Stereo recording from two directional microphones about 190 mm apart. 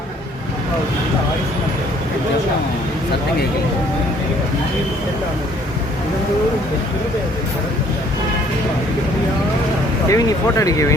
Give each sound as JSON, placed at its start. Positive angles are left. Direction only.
{"t": 10.1, "sound": "speech", "side_deg": 15}